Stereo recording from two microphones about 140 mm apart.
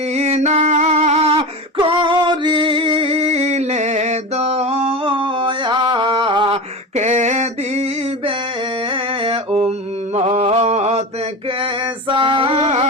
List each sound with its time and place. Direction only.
0.1 s a sound: 50° right (ahead or behind)
1.4 s singing: 35° right (ahead or behind)
6.9 s a sound: 55° right (ahead or behind)
8.9 s music: 40° right (ahead or behind)
10.2 s mantra: 50° right (ahead or behind)
11.6 s female singing: 35° right (ahead or behind)
12.6 s carnatic music: 50° right (ahead or behind)